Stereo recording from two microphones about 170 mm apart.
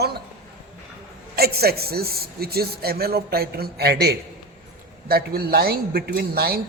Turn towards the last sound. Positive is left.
turn(degrees=-65)  # may be behind; listen again after turning